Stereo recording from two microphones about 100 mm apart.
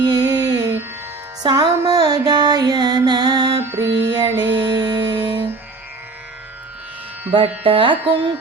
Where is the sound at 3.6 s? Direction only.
30° right (ahead or behind).